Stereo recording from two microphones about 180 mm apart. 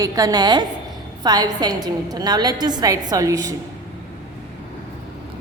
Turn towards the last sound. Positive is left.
turn(degrees=-20)  # may be behind; listen again after turning